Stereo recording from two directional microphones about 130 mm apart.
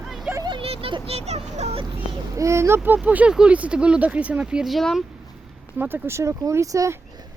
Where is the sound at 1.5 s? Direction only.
55° right (ahead or behind).